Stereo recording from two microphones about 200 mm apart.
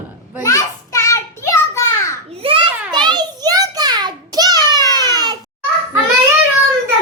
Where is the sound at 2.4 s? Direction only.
25° right (ahead or behind).